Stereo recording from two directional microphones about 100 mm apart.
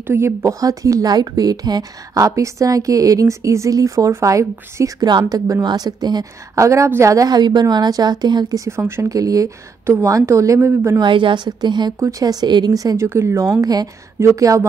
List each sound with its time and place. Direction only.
0.0 s speech: 25° right (ahead or behind)
5.0 s a woman's voice: 45° right (ahead or behind)
6.5 s speech: 30° right (ahead or behind)
8.6 s speech: 25° right (ahead or behind)
11.0 s a woman's voice: 55° right (ahead or behind)
12.0 s speech: 35° right (ahead or behind)